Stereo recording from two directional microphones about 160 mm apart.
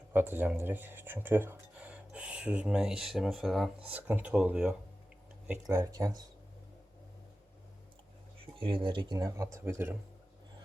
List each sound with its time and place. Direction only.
0.1 s speech: 15° right (ahead or behind)
5.6 s speech: 20° right (ahead or behind)
8.5 s speech: 30° right (ahead or behind); by 10.0 s 15° right (ahead or behind)